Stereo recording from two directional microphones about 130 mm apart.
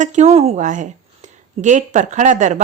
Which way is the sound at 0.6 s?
75° right (ahead or behind).